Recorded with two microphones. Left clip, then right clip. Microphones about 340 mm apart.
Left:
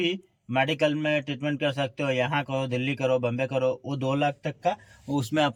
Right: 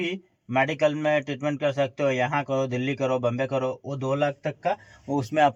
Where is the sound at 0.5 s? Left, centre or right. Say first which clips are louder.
Right 2 dB; centre.